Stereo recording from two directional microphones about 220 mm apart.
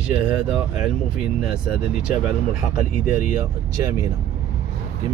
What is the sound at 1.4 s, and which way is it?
Speech, centre (ahead or behind).